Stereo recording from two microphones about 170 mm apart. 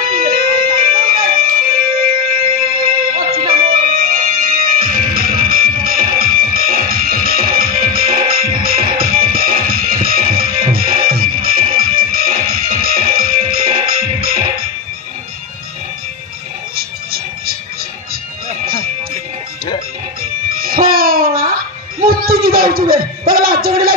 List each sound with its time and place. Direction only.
0.0 s music: 55° right (ahead or behind)
16.7 s television: 60° right (ahead or behind)
20.2 s music: 60° right (ahead or behind)
22.0 s a sound: 60° right (ahead or behind)